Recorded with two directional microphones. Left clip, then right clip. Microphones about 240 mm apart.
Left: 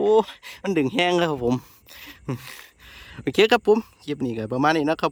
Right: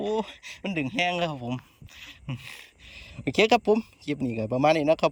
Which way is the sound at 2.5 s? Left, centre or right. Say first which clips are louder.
Left 2 dB; centre.